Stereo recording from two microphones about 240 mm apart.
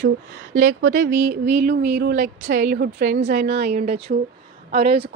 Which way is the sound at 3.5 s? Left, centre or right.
Right.